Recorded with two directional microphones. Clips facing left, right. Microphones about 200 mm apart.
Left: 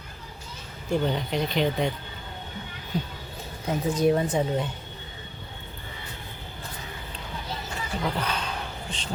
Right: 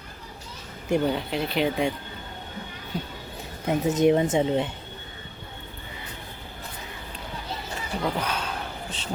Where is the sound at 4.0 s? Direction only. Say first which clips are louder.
Right 2 dB; 20° right (ahead or behind).